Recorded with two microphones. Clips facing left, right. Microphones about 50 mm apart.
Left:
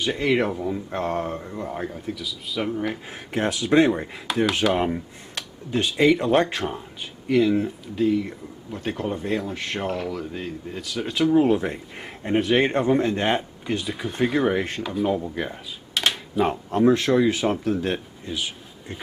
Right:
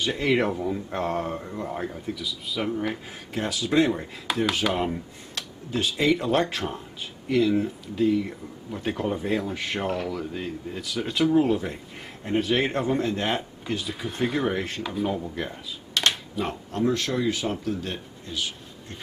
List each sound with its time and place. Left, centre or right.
0.0 s speech: centre
3.1 s speech: left
3.6 s speech: centre
12.3 s speech: centre
12.6 s speech: centre
15.1 s speech: centre
16.3 s speech: centre
17.6 s speech: left
18.2 s a sound: centre